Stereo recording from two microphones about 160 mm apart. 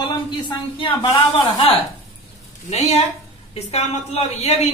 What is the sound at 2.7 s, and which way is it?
Speech, 45° left (ahead or behind).